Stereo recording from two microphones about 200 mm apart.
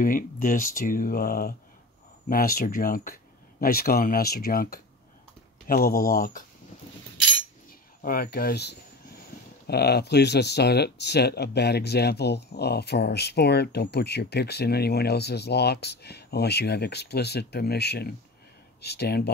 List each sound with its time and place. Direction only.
0.0 s speech: 45° left (ahead or behind)
8.0 s speech: 50° left (ahead or behind)